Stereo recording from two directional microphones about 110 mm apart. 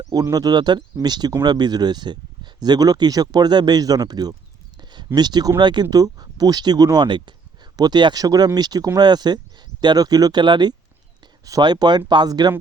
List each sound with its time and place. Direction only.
0.1 s speech: 35° right (ahead or behind)
4.8 s a sound: 40° right (ahead or behind)
5.1 s speech: 40° right (ahead or behind)